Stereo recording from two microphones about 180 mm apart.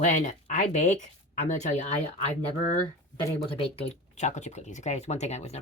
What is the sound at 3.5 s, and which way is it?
Speech, 35° left (ahead or behind).